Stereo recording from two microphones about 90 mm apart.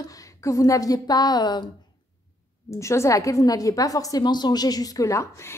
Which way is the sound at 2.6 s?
35° left (ahead or behind).